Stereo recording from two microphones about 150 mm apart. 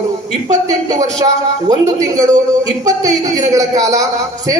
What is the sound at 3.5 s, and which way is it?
Speech, 25° right (ahead or behind).